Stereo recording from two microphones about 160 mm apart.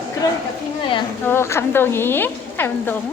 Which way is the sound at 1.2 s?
15° left (ahead or behind).